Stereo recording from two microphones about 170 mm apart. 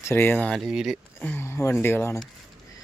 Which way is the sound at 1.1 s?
10° left (ahead or behind).